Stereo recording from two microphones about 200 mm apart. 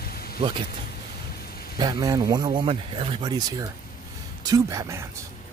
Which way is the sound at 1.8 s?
20° right (ahead or behind).